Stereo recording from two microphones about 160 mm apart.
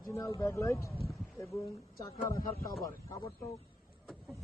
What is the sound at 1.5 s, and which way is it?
Speech, 20° left (ahead or behind).